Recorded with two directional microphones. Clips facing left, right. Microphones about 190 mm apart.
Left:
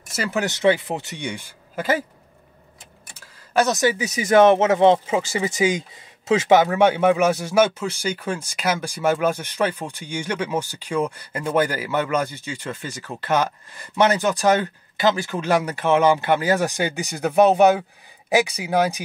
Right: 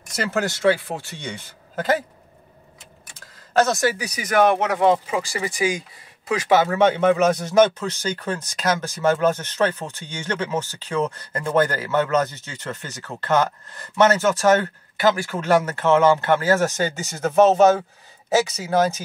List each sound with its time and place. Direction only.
0.1 s speech: 10° left (ahead or behind)
3.2 s speech: 15° left (ahead or behind)